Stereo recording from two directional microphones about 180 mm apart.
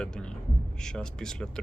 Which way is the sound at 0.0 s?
5° left (ahead or behind).